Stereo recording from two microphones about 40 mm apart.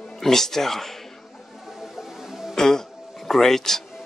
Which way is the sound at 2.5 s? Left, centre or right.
Centre.